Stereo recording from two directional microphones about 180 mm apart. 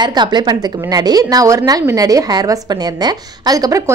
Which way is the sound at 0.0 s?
25° right (ahead or behind).